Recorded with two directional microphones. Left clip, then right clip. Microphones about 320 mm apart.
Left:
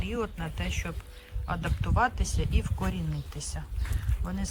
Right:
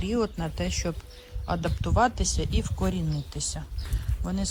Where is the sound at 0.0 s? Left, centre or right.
Centre.